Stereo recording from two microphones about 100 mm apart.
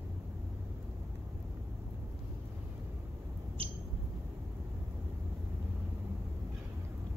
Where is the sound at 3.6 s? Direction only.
75° right (ahead or behind).